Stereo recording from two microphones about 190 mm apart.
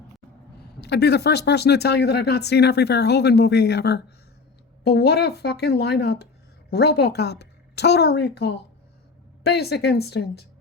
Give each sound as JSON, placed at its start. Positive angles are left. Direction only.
{"t": 0.8, "sound": "a woman's voice", "side_deg": 60}